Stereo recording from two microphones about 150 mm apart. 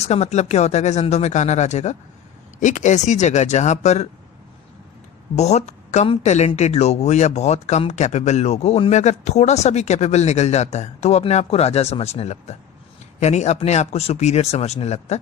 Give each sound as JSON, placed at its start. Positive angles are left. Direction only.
{"t": 0.0, "sound": "speech", "side_deg": 45}
{"t": 5.4, "sound": "speech", "side_deg": 45}